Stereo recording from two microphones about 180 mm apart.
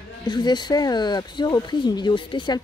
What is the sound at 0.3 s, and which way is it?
Speech, 25° left (ahead or behind).